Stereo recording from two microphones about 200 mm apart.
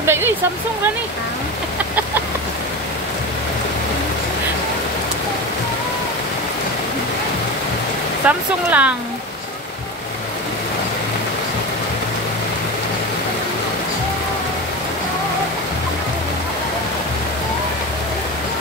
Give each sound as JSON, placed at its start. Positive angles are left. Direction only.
{"t": 0.0, "sound": "speech", "side_deg": -10}
{"t": 8.3, "sound": "speech", "side_deg": -5}